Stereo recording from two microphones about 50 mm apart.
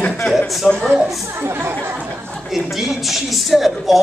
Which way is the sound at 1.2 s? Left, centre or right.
Right.